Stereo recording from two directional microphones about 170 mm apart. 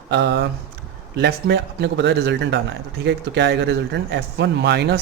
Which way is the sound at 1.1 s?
75° right (ahead or behind).